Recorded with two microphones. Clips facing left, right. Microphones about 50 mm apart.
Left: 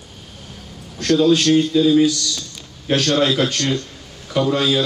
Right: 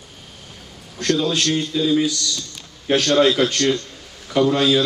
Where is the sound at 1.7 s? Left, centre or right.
Centre.